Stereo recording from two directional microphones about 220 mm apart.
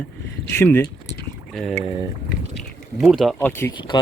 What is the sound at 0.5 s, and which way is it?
Speech, 10° left (ahead or behind).